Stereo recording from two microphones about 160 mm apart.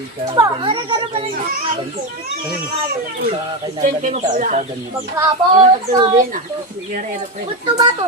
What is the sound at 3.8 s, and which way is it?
Speech, 50° right (ahead or behind).